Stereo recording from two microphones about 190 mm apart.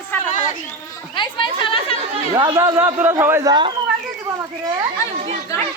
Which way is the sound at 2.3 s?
25° right (ahead or behind).